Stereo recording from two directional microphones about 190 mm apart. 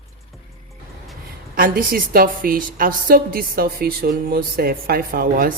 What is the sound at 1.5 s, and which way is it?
A woman's voice, 50° right (ahead or behind).